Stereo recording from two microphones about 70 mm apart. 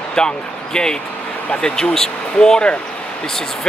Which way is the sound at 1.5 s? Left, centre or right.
Centre.